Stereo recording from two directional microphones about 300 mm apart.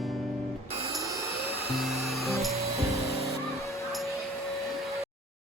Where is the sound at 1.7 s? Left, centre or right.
Centre.